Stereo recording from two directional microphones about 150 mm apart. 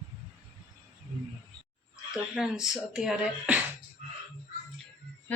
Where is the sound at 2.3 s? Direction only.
5° right (ahead or behind).